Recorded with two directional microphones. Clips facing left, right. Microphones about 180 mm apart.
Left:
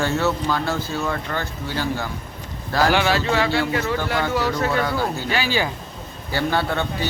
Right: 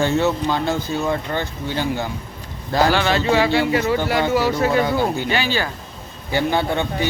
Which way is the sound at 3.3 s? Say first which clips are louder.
Right 4 dB; 15° right (ahead or behind).